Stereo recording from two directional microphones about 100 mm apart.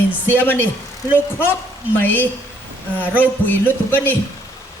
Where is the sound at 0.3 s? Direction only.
20° left (ahead or behind).